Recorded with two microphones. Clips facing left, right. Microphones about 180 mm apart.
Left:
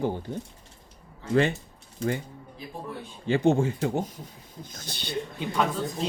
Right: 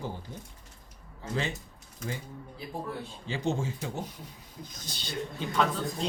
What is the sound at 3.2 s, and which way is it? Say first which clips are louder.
Speech: left 10 dB; 60° left (ahead or behind).